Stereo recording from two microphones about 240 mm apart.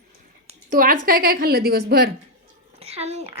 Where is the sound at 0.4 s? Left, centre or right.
Right.